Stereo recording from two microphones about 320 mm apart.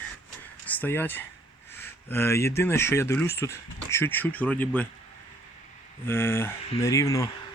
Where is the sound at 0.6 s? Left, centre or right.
Centre.